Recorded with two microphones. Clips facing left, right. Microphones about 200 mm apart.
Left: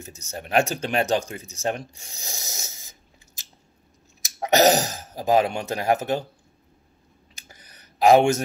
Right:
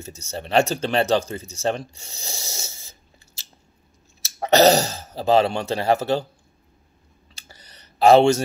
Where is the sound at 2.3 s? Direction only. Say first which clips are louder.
Right 3 dB; 15° left (ahead or behind).